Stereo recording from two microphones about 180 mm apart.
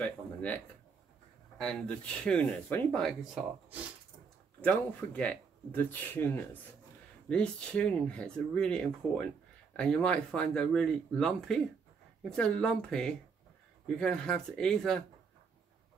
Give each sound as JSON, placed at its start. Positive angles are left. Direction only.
{"t": 0.0, "sound": "a sound", "side_deg": 10}
{"t": 1.6, "sound": "speech", "side_deg": 5}
{"t": 4.6, "sound": "speech", "side_deg": 5}